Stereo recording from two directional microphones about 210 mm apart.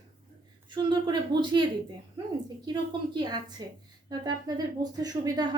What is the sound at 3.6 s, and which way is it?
A woman's voice, 20° right (ahead or behind).